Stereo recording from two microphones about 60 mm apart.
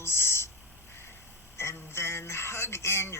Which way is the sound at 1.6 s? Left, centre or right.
Left.